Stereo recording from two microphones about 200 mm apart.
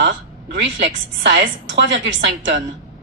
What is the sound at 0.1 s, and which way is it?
A woman's voice, 65° right (ahead or behind).